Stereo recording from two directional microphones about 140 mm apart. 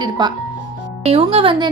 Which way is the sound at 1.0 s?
45° right (ahead or behind).